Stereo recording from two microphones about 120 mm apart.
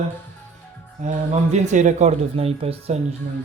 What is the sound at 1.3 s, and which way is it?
A man's voice, 80° right.